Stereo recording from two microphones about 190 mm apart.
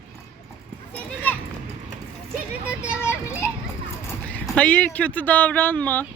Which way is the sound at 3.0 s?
15° left (ahead or behind).